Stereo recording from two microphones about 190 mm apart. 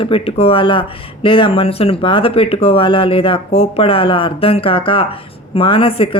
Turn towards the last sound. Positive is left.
turn(degrees=30)  # may be behind; listen again after turning